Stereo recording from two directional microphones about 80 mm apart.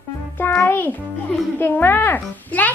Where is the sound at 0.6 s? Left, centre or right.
Left.